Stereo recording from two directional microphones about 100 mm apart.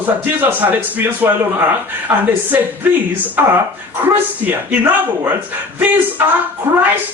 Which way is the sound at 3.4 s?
20° right (ahead or behind).